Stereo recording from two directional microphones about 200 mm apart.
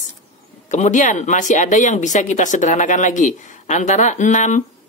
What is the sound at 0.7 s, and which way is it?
Speech, 35° left (ahead or behind).